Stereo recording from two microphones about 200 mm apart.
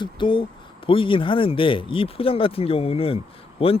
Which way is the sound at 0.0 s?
25° left (ahead or behind).